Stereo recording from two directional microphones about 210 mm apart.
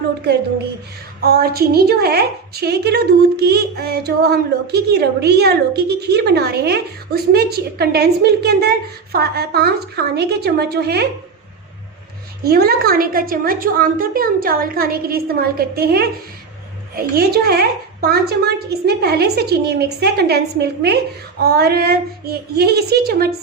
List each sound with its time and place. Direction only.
0.2 s a woman's voice: 50° right (ahead or behind)
12.4 s a woman's voice: 45° right (ahead or behind)